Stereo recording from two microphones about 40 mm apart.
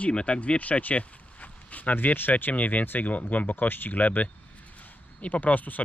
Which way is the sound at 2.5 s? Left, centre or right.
Left.